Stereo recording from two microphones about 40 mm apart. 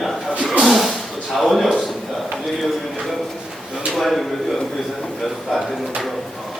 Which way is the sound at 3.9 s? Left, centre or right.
Centre.